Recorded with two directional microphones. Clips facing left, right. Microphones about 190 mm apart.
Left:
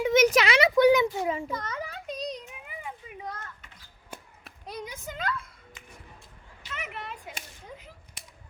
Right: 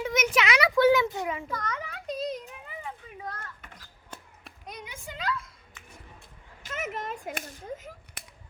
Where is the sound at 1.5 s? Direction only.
30° left (ahead or behind).